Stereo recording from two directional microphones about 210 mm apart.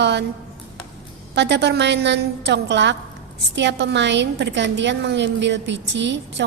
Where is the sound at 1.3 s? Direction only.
55° right (ahead or behind).